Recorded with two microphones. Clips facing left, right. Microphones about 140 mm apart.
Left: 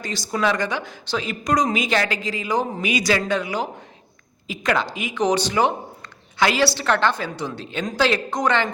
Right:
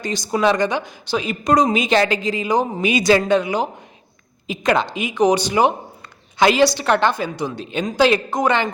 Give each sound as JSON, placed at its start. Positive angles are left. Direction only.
{"t": 0.0, "sound": "a woman's voice", "side_deg": -20}